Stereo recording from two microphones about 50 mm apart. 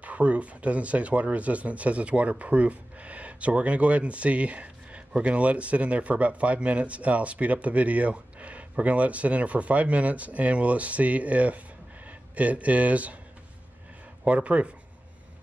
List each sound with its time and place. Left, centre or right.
0.0 s speech: right
14.2 s speech: right